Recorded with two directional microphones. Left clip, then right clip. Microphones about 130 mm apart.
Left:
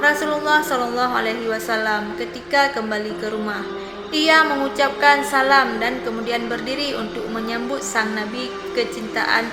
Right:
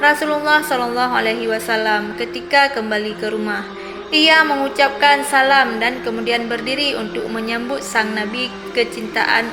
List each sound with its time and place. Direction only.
0.0 s a woman's voice: 20° right (ahead or behind)